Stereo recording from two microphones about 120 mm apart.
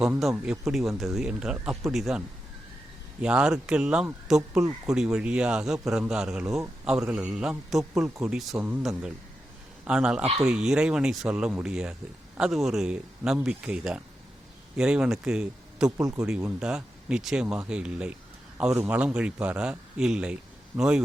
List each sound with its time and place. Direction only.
0.2 s a man's voice: centre (ahead or behind)
9.8 s a man's voice: 5° right (ahead or behind)
16.0 s speech: 30° right (ahead or behind)
16.6 s a man's voice: 5° right (ahead or behind)